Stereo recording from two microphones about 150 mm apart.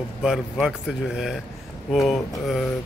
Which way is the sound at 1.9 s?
Centre (ahead or behind).